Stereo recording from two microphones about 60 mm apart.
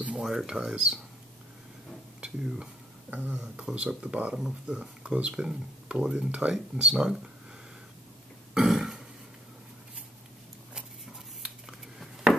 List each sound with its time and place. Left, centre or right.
0.2 s speech: centre
2.2 s speech: centre
3.1 s speech: right
8.5 s burping: centre
11.4 s a sound: centre